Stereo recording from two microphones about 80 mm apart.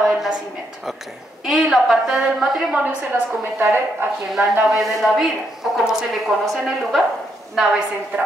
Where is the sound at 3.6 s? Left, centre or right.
Right.